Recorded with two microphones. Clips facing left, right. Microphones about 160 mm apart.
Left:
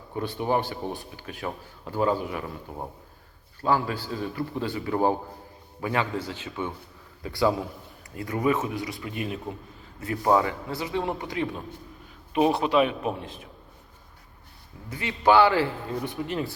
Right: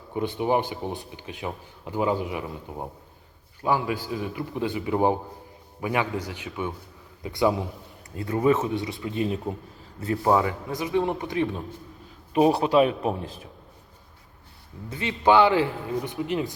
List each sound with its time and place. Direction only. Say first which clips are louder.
0.1 s a man's voice: right 2 dB; 15° right (ahead or behind)
9.5 s speech: right 4 dB; 10° right (ahead or behind)
10.2 s a man's voice: even; 20° right (ahead or behind)
12.5 s a man's voice: right 2 dB; 35° right (ahead or behind)
14.8 s a man's voice: right 1 dB; 20° right (ahead or behind)